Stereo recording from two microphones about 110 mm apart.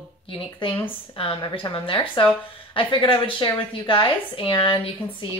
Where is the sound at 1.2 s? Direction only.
50° left (ahead or behind).